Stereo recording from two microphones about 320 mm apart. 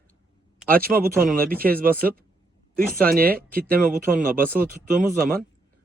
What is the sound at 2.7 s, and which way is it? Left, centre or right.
Speech, right.